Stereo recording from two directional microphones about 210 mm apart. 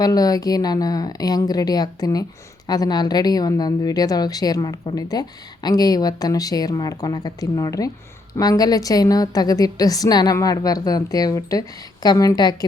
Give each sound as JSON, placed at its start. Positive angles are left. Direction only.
{"t": 0.0, "sound": "a woman's voice", "side_deg": 20}